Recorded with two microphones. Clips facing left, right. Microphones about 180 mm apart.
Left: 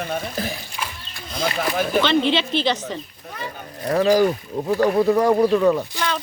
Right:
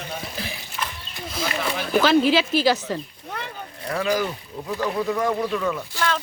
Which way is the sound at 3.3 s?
65° right (ahead or behind).